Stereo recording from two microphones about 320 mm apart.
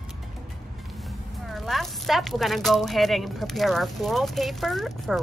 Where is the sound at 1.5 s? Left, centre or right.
Centre.